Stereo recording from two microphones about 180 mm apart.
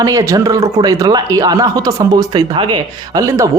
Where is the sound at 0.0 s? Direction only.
20° right (ahead or behind).